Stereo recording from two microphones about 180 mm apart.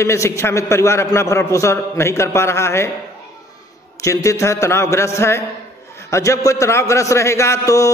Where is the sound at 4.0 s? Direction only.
15° left (ahead or behind).